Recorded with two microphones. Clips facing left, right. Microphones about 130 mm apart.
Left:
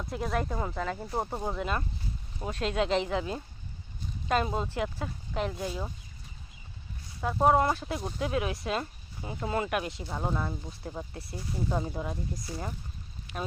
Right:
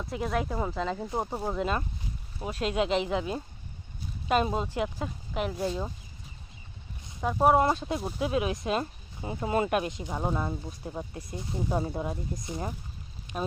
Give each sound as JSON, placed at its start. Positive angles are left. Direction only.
{"t": 0.0, "sound": "speech", "side_deg": 0}
{"t": 7.2, "sound": "speech", "side_deg": -15}